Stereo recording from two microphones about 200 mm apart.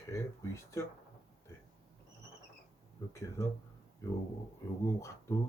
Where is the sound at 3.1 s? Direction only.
15° left (ahead or behind).